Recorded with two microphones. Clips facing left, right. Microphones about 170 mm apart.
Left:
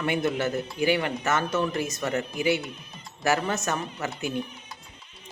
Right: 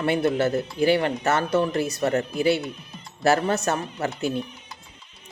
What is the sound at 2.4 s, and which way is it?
Speech, 15° left (ahead or behind).